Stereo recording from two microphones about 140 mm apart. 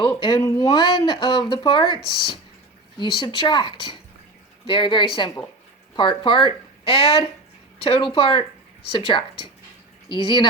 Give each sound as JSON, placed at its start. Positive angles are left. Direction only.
{"t": 0.3, "sound": "speech", "side_deg": 25}